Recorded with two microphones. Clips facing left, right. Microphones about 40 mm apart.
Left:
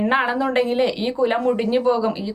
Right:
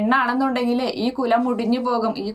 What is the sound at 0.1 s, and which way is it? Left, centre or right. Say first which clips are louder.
A woman's voice: even; left.